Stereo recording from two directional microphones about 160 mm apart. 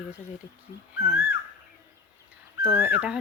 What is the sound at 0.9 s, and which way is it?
Speech, 10° right (ahead or behind).